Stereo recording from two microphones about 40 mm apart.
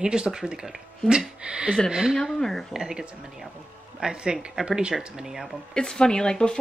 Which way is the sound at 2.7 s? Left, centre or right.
Centre.